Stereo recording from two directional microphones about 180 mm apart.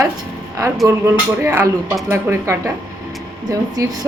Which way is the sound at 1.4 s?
15° right (ahead or behind).